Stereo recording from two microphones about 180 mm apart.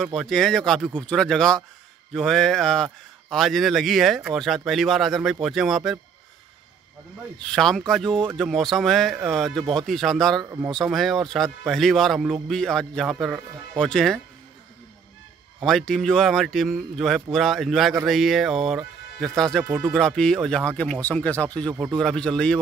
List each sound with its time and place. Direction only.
0.0 s a man's voice: centre (ahead or behind)
7.3 s a man's voice: 5° left (ahead or behind)
10.4 s speech: 15° right (ahead or behind)
10.7 s a man's voice: centre (ahead or behind)
15.6 s a man's voice: centre (ahead or behind)